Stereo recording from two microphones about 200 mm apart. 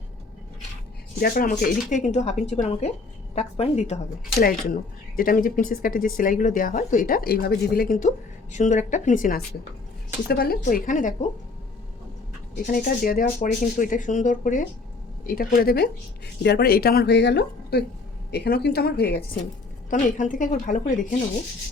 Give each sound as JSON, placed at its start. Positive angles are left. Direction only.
{"t": 1.2, "sound": "speech", "side_deg": 45}
{"t": 4.4, "sound": "speech", "side_deg": 45}
{"t": 12.7, "sound": "speech", "side_deg": 45}
{"t": 19.9, "sound": "speech", "side_deg": 40}